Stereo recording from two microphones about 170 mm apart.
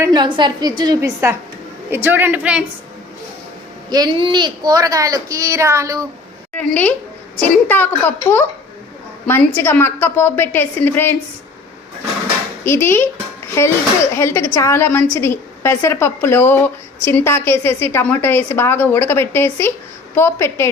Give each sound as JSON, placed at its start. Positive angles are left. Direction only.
{"t": 0.0, "sound": "a woman's voice", "side_deg": -25}
{"t": 3.8, "sound": "a woman's voice", "side_deg": -25}
{"t": 6.6, "sound": "a woman's voice", "side_deg": 10}
{"t": 12.6, "sound": "a woman's voice", "side_deg": 15}